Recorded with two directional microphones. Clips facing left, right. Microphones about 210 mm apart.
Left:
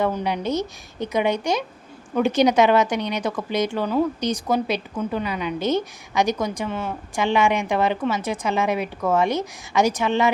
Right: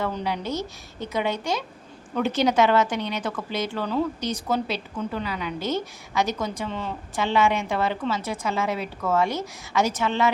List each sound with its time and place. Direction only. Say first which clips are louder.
0.0 s speech: left 5 dB; 20° left (ahead or behind)